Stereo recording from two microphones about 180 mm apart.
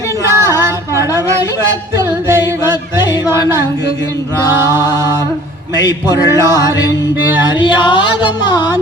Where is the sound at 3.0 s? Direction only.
20° left (ahead or behind).